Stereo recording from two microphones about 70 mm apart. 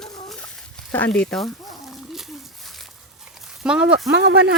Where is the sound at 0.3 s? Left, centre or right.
Centre.